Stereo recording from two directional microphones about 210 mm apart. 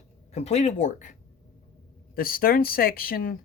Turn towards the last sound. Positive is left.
turn(degrees=45)  # may be behind; listen again after turning